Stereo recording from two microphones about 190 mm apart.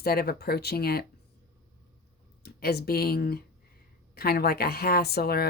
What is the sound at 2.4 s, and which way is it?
Speech, 55° left (ahead or behind).